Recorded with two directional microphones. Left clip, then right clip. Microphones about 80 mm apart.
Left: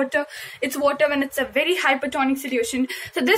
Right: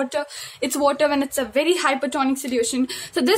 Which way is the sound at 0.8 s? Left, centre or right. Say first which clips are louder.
Even; right.